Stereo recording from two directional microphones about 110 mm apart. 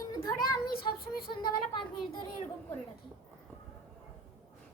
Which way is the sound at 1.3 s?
45° left (ahead or behind).